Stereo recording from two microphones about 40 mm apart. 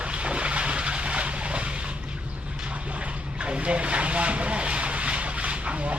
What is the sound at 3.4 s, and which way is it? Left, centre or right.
Vehicle, right.